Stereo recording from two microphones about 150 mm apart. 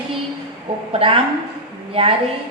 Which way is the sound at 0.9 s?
35° right (ahead or behind).